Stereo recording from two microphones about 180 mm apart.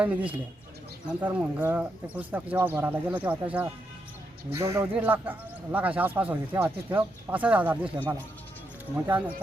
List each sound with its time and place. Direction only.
0.0 s speech: 10° right (ahead or behind)
9.0 s speech: 10° right (ahead or behind)